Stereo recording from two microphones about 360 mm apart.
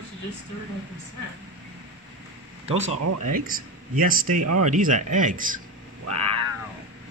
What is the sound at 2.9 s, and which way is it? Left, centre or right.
Speech, right.